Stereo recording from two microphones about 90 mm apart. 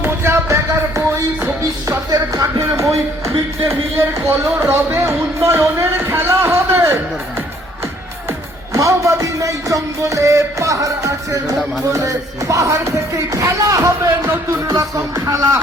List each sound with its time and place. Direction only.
0.0 s music: 25° right (ahead or behind)
1.9 s music: 40° right (ahead or behind)
3.9 s speech: 30° right (ahead or behind)